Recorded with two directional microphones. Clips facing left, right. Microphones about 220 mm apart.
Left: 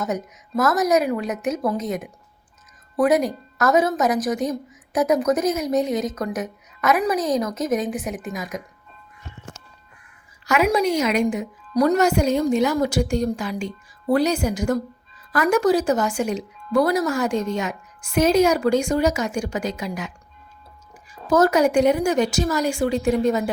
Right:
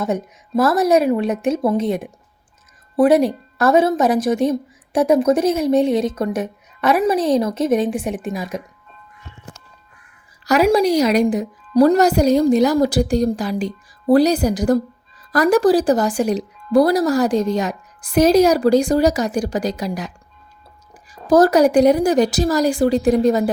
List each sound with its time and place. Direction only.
0.0 s a woman's voice: 30° right (ahead or behind)
10.4 s speech: 35° right (ahead or behind)
21.2 s speech: 35° right (ahead or behind)